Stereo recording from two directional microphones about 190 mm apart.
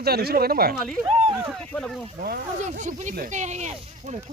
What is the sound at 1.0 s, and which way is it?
Speech, 30° right (ahead or behind).